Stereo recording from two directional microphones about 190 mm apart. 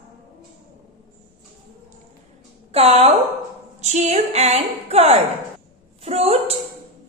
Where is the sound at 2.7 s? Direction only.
30° right (ahead or behind).